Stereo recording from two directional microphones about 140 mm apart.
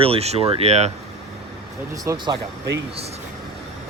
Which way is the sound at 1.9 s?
25° right (ahead or behind).